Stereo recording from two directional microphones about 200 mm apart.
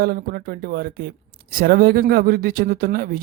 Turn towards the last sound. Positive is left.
turn(degrees=-45)  # may be behind; listen again after turning